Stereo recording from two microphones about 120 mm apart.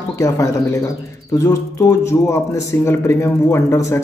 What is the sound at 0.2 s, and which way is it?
A man's voice, 25° left (ahead or behind).